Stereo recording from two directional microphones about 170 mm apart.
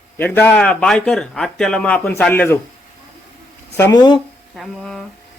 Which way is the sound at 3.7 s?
15° left (ahead or behind).